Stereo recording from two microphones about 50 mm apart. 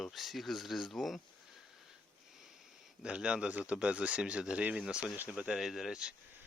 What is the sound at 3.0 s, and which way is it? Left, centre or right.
Speech, centre.